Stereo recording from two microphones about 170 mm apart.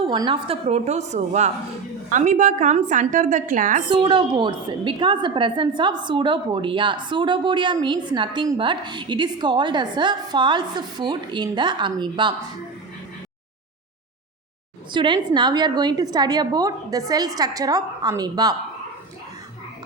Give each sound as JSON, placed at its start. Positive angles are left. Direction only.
{"t": 0.0, "sound": "a woman's voice", "side_deg": -30}
{"t": 3.8, "sound": "a woman's voice", "side_deg": -30}
{"t": 14.9, "sound": "a woman's voice", "side_deg": -25}